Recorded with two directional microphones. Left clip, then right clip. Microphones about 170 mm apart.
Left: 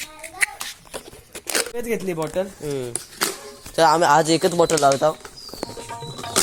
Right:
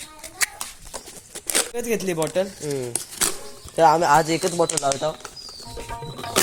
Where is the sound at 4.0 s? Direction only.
30° left (ahead or behind).